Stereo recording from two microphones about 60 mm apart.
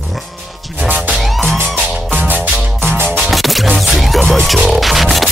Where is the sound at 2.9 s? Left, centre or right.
Right.